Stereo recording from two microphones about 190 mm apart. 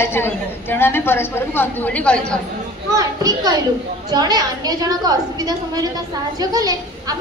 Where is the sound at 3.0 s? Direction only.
20° right (ahead or behind).